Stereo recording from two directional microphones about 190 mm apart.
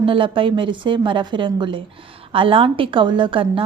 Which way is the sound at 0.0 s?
25° right (ahead or behind).